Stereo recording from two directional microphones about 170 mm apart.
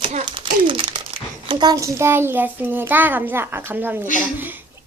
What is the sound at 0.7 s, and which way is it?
A child's voice, 30° right (ahead or behind).